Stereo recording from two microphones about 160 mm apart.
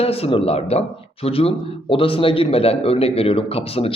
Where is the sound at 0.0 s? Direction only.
35° left (ahead or behind).